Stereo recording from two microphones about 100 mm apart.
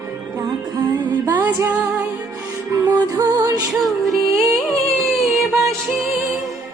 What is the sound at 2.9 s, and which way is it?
Music, 40° right (ahead or behind).